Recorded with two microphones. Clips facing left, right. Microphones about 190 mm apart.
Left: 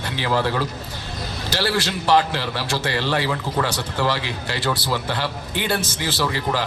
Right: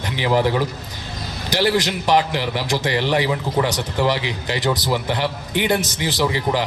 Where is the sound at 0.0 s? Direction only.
15° right (ahead or behind).